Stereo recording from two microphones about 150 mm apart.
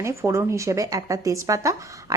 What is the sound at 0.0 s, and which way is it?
A woman's voice, 20° right (ahead or behind).